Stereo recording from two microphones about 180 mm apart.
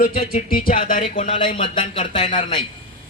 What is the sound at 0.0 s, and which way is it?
Speech, 55° left (ahead or behind).